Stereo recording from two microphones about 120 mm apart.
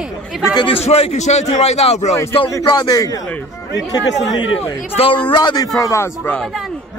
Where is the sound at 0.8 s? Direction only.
60° left (ahead or behind).